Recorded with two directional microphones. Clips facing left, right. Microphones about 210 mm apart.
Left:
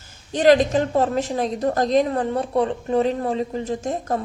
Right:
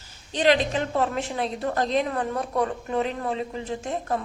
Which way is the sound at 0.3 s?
45° left (ahead or behind).